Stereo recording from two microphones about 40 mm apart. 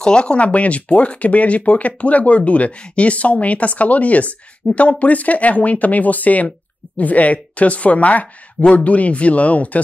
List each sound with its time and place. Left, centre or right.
0.0 s speech: left